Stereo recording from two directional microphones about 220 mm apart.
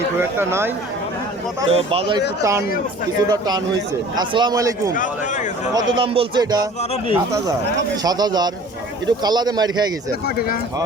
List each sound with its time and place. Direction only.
0.2 s a man's voice: 10° right (ahead or behind)
1.7 s a man's voice: 25° right (ahead or behind)
4.9 s a man's voice: 35° left (ahead or behind)
5.7 s a man's voice: 20° right (ahead or behind)
10.2 s speech: 40° left (ahead or behind)